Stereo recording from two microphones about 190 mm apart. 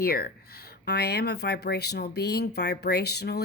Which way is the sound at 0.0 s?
55° left (ahead or behind).